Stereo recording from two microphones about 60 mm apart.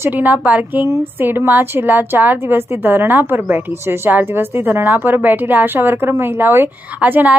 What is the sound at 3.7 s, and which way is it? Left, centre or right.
A woman's voice, right.